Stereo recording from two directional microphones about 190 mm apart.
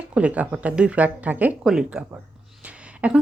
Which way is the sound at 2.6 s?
5° right (ahead or behind).